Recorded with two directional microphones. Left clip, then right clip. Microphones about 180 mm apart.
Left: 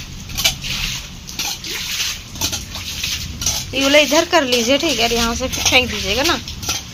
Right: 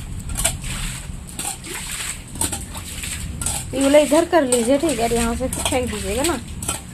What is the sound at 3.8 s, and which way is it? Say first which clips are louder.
Speech: left 1 dB; 10° right (ahead or behind).